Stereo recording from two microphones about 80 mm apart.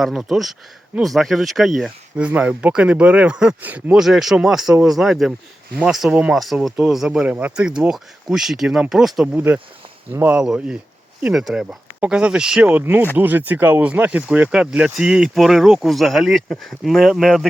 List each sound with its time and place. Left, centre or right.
0.0 s speech: centre
2.1 s speech: centre
3.9 s speech: centre
9.2 s speech: right
10.3 s speech: centre
12.7 s speech: right; by 17.5 s centre